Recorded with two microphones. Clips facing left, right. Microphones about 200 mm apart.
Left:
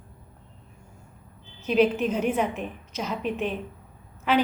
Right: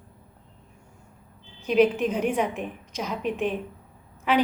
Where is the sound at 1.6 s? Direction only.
10° right (ahead or behind).